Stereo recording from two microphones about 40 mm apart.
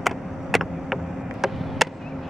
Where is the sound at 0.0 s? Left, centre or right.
Centre.